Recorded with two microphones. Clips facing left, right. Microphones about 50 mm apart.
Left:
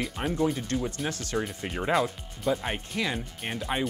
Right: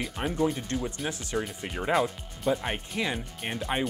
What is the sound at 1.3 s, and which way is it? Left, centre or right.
Speech, centre.